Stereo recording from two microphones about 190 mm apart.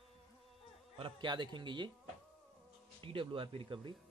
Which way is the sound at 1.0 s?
25° right (ahead or behind).